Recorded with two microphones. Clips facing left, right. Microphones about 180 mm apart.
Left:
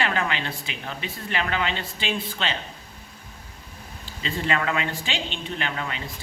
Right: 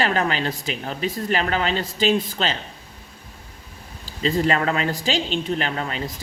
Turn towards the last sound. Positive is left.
turn(degrees=-35)  # may be behind; listen again after turning